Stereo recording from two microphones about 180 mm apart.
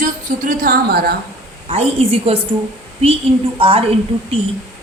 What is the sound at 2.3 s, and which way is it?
Speech, 35° right (ahead or behind).